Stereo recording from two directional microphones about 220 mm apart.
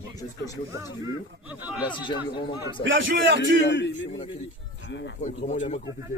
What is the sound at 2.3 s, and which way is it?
Speech, 20° left (ahead or behind).